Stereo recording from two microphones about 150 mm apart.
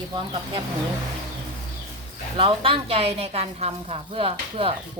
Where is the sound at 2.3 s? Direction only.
35° right (ahead or behind).